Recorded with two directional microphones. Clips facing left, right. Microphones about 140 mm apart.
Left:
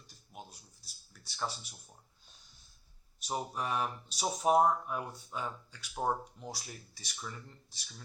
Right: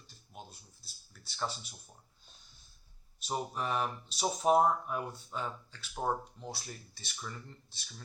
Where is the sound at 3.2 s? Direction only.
5° left (ahead or behind).